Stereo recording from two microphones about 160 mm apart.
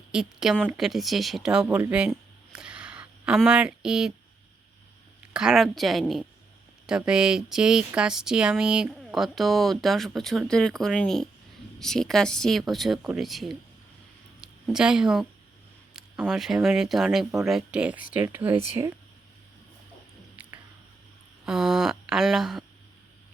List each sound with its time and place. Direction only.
0.1 s speech: 5° right (ahead or behind)
5.3 s a woman's voice: 5° right (ahead or behind)
15.9 s a sound: centre (ahead or behind)
16.6 s speech: centre (ahead or behind)
20.3 s squish: 10° right (ahead or behind)
21.4 s a sound: 5° right (ahead or behind)